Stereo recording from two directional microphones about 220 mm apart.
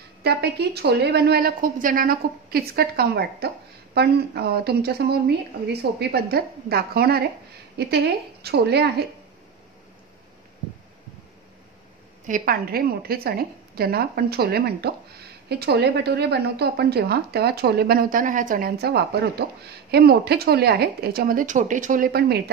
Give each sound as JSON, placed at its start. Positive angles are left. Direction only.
{"t": 0.2, "sound": "a woman's voice", "side_deg": -50}
{"t": 12.3, "sound": "a woman's voice", "side_deg": -40}